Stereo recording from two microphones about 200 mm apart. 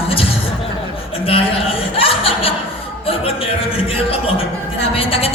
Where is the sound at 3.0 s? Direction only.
30° left (ahead or behind).